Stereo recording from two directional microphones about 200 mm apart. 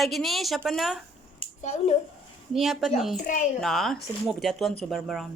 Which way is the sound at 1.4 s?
35° left (ahead or behind).